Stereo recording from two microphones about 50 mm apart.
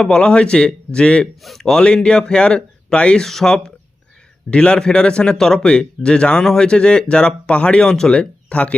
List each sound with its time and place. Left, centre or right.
0.0 s speech: centre
1.4 s speech: centre
3.2 s speech: centre